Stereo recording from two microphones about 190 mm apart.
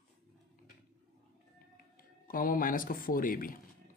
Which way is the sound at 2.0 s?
50° left (ahead or behind).